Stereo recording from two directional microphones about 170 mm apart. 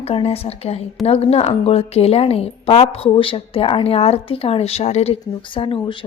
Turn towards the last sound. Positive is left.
turn(degrees=30)  # may be behind; listen again after turning